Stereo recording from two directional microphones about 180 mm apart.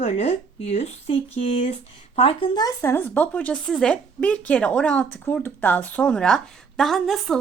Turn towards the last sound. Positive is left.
turn(degrees=0)  # may be behind; listen again after turning